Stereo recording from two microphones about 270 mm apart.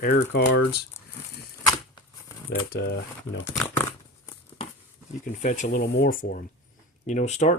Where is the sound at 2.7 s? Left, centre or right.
Left.